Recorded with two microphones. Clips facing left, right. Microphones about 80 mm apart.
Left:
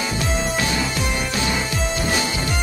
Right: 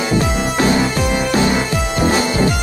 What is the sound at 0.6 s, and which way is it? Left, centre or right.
Music, right.